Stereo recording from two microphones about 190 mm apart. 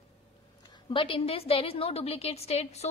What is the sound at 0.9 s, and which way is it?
A woman's voice, 25° left (ahead or behind).